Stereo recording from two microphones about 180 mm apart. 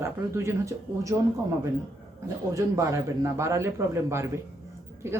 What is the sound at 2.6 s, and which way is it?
Speech, 15° right (ahead or behind).